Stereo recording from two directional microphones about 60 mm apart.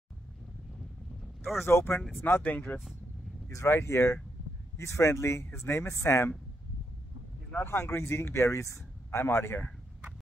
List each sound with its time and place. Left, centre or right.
1.2 s boat: centre
1.7 s speech: left
2.4 s speech: left
3.4 s speech: left
7.5 s speech: left